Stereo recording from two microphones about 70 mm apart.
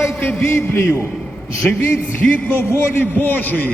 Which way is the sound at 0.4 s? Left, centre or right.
Left.